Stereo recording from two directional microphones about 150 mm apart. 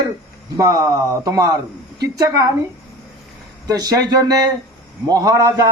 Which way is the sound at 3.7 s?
25° right (ahead or behind).